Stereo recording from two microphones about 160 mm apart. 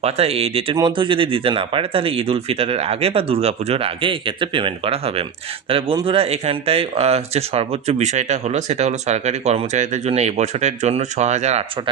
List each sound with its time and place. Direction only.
0.0 s speech: 40° right (ahead or behind)